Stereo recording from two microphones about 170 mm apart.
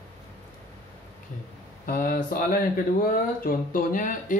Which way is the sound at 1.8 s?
55° left (ahead or behind).